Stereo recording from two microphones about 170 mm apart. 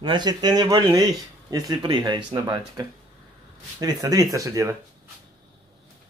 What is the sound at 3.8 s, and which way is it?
Speech, 20° right (ahead or behind).